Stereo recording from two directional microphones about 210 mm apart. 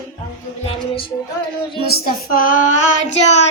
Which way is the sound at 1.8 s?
45° left (ahead or behind).